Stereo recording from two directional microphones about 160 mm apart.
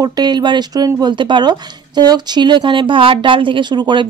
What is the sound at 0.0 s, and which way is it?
Speech, 25° right (ahead or behind).